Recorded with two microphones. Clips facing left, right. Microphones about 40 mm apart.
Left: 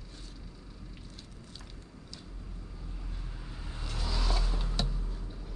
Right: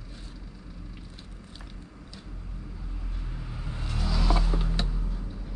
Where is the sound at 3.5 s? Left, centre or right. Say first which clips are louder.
Right 5 dB; right.